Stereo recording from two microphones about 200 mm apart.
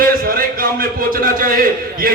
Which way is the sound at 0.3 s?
45° right (ahead or behind).